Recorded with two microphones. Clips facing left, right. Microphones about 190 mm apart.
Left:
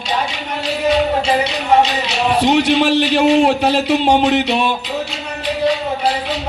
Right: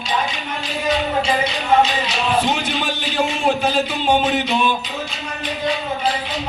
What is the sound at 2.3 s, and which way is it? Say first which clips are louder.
A man's voice: left 10 dB; 70° left (ahead or behind).